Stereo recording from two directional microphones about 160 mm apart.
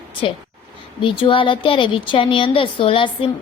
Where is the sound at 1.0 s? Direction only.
30° left (ahead or behind).